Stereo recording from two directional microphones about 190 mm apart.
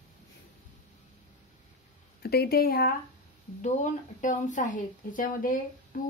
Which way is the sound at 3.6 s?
40° left (ahead or behind).